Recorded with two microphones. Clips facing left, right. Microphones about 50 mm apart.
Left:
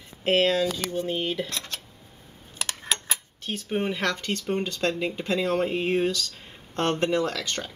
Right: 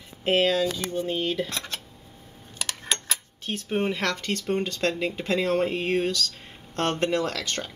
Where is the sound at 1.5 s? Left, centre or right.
Right.